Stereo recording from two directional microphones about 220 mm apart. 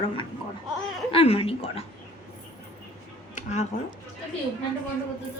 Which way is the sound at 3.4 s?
30° left (ahead or behind).